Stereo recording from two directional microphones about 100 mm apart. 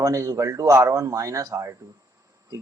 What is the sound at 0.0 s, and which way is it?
Speech, 35° right (ahead or behind).